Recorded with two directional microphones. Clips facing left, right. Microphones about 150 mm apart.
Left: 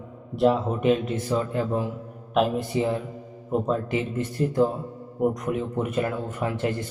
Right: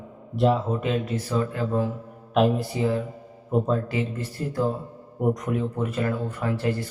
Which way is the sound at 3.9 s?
20° left (ahead or behind).